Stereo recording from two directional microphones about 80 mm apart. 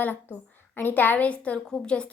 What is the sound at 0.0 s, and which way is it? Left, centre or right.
A woman's voice, left.